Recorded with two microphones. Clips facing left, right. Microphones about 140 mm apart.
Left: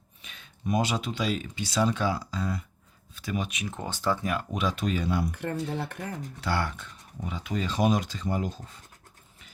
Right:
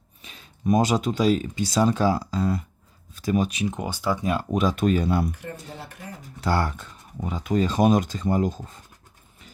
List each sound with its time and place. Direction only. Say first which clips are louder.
0.2 s speech: right 6 dB; 35° right (ahead or behind)
3.7 s speech: right 3 dB; 15° right (ahead or behind)
4.5 s speech: right 10 dB; 45° right (ahead or behind)
5.3 s speech: left 6 dB; 60° left (ahead or behind)
6.4 s speech: right 6 dB; 40° right (ahead or behind)